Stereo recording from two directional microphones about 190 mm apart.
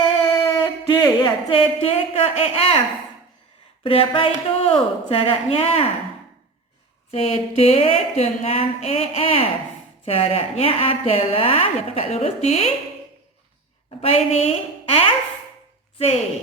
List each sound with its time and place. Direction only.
0.0 s speech: 25° left (ahead or behind)
3.8 s a woman's voice: 30° left (ahead or behind)
7.1 s a woman's voice: 30° left (ahead or behind)
14.0 s a woman's voice: 35° left (ahead or behind)